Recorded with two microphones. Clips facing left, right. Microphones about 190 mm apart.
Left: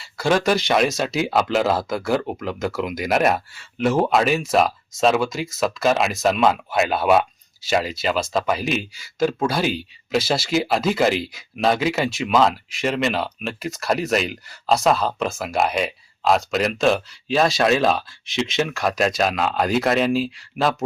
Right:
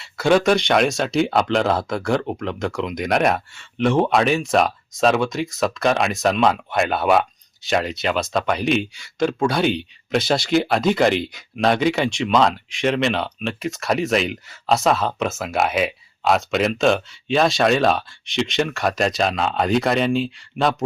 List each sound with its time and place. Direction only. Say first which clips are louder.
0.0 s speech: right 3 dB; centre (ahead or behind)